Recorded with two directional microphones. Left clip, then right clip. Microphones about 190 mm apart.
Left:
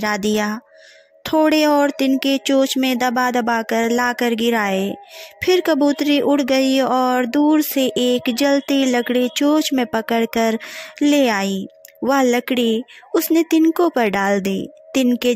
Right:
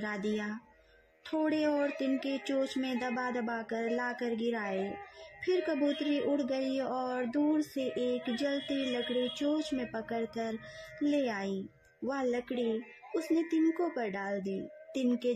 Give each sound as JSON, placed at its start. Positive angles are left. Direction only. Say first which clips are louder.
{"t": 0.0, "sound": "speech", "louder": "left 16 dB", "side_deg": 45}